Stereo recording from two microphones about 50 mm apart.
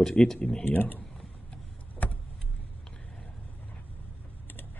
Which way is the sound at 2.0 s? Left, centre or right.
Left.